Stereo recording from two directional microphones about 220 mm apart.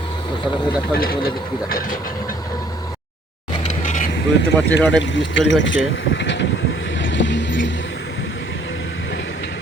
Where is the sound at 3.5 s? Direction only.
30° left (ahead or behind).